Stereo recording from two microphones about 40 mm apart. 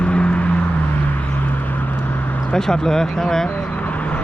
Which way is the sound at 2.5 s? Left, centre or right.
Centre.